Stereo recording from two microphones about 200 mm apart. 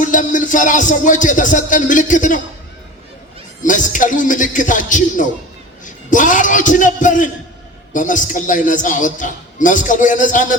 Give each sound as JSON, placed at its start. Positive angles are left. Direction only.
{"t": 0.0, "sound": "a man's voice", "side_deg": 40}
{"t": 3.6, "sound": "a man's voice", "side_deg": 40}